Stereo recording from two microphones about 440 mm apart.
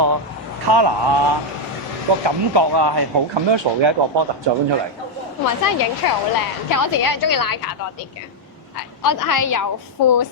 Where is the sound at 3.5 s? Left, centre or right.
Right.